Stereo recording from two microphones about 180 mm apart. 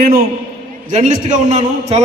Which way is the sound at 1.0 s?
45° right (ahead or behind).